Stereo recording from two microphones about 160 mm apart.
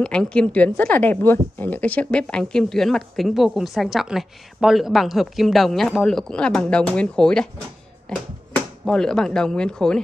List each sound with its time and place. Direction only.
0.0 s a woman's voice: 5° left (ahead or behind)